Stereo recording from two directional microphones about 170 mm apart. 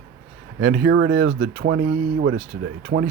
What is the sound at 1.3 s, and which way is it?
Speech, 50° right (ahead or behind).